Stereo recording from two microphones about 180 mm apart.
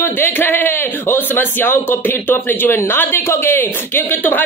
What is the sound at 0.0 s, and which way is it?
A man's voice, 10° left (ahead or behind).